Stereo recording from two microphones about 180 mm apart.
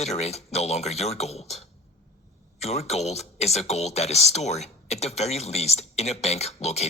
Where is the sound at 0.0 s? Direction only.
35° left (ahead or behind).